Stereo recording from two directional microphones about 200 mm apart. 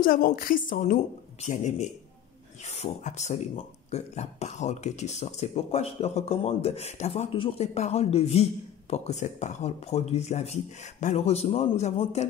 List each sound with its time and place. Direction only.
0.0 s speech: 45° left (ahead or behind)